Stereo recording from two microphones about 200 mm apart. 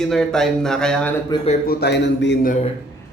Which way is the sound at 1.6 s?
50° left (ahead or behind).